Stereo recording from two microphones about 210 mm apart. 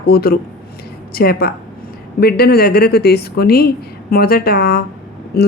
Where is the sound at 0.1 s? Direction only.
45° left (ahead or behind).